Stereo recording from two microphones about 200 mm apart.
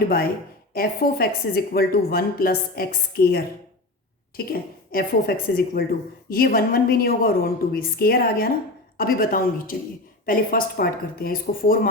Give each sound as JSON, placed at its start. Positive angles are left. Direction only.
{"t": 0.7, "sound": "a woman's voice", "side_deg": 50}